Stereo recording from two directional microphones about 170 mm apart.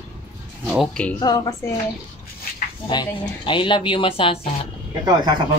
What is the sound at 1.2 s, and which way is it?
Speech, 25° left (ahead or behind).